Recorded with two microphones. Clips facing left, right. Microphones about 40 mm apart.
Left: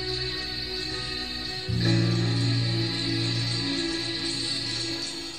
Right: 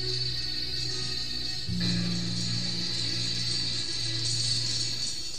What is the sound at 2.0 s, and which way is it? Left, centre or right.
Music, left.